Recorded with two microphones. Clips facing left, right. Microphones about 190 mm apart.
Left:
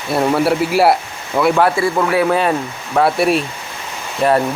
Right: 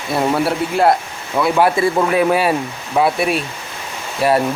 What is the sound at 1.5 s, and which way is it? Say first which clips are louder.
Speech: even; 15° right (ahead or behind).